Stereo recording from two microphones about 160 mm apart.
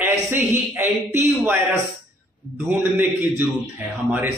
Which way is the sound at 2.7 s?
10° right (ahead or behind).